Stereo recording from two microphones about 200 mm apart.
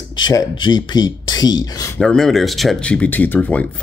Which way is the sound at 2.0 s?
Centre (ahead or behind).